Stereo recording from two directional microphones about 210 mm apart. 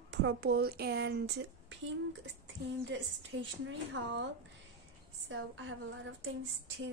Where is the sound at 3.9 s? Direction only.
60° right (ahead or behind).